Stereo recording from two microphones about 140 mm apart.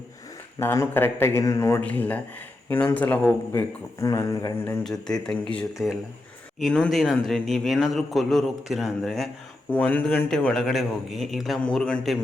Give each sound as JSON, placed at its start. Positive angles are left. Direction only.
{"t": 0.6, "sound": "speech", "side_deg": 15}
{"t": 4.0, "sound": "speech", "side_deg": 25}
{"t": 4.8, "sound": "a man's voice", "side_deg": 5}
{"t": 9.7, "sound": "a man's voice", "side_deg": 10}